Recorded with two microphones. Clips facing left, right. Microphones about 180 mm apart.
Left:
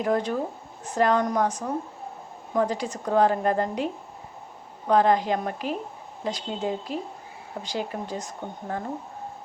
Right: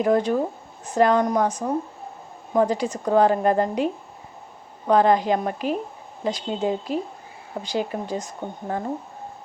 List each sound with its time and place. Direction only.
0.0 s a woman's voice: 20° right (ahead or behind)
4.9 s a woman's voice: 20° right (ahead or behind)